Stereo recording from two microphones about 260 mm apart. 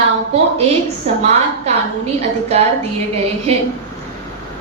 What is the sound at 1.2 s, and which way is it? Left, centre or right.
A woman's voice, right.